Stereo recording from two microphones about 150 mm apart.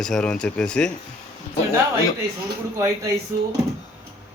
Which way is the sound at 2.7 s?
20° right (ahead or behind).